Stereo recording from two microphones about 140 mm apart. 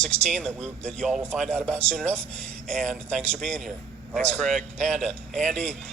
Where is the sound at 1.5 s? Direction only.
15° right (ahead or behind).